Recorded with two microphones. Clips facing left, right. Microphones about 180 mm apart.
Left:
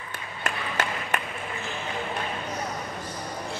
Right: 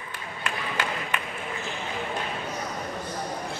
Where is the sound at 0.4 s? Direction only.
45° left (ahead or behind).